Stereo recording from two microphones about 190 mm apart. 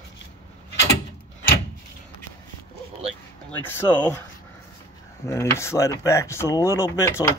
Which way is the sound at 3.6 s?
10° left (ahead or behind).